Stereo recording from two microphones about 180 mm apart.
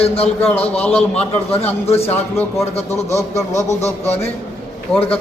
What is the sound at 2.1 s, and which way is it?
Speech, 10° left (ahead or behind).